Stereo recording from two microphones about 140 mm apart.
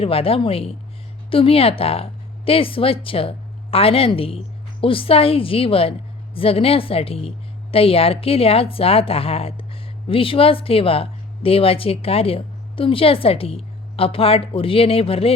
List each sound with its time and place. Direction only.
0.0 s a woman's voice: 45° left (ahead or behind)